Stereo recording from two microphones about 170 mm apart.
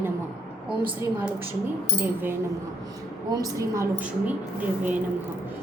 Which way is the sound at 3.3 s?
20° right (ahead or behind).